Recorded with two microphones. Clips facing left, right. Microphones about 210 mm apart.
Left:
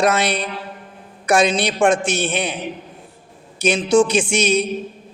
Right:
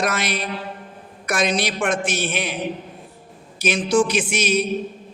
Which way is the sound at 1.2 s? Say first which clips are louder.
Left 5 dB; 30° left (ahead or behind).